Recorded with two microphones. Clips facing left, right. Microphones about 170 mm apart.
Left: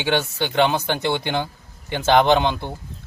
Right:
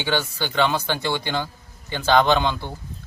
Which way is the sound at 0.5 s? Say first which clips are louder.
Left 2 dB; 20° left (ahead or behind).